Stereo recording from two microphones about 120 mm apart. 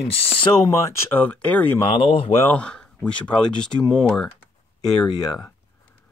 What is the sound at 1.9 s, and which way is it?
Speech, 45° left (ahead or behind).